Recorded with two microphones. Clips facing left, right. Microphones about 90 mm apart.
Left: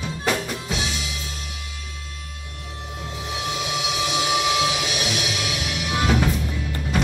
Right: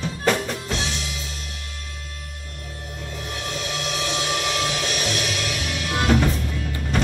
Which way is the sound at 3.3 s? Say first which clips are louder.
Left 3 dB; 5° left (ahead or behind).